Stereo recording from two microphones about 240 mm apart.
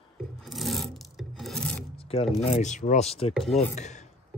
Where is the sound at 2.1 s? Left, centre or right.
Left.